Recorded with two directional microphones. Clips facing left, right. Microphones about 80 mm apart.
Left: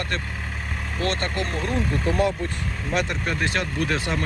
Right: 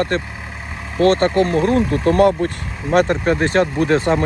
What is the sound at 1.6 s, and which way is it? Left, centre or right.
Speech, right.